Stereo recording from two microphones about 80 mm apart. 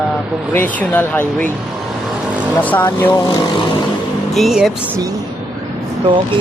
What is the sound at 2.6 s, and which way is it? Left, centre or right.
Speech, left.